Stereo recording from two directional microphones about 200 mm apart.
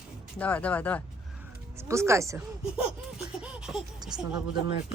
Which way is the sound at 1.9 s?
15° right (ahead or behind).